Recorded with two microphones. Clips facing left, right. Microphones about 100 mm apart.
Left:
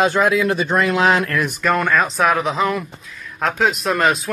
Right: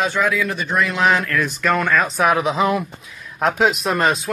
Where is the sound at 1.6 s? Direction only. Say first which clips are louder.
Left 1 dB; 5° left (ahead or behind).